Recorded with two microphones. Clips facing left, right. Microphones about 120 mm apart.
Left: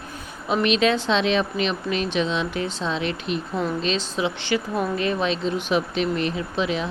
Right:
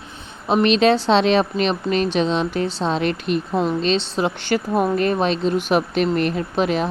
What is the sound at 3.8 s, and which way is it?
Speech, 30° right (ahead or behind).